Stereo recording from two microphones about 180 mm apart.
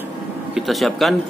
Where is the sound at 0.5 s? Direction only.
Centre (ahead or behind).